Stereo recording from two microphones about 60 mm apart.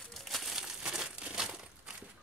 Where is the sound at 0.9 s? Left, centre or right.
Centre.